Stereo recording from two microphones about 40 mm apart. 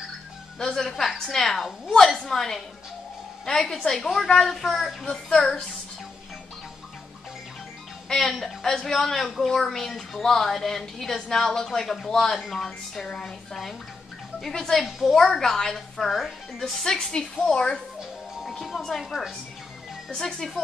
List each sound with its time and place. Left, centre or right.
0.6 s a woman's voice: centre
5.0 s a woman's voice: centre
8.1 s a woman's voice: centre
14.9 s speech: centre
15.1 s a woman's voice: centre
18.6 s a woman's voice: centre